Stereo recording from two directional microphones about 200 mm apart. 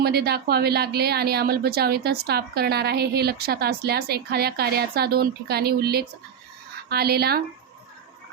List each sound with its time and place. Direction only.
0.0 s a woman's voice: 50° right (ahead or behind)